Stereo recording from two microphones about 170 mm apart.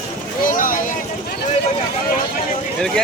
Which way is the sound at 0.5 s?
55° left (ahead or behind).